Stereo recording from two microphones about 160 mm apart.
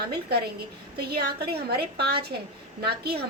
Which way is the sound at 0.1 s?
85° right.